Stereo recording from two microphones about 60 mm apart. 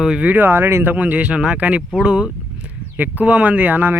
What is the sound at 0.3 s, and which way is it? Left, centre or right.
Speech, right.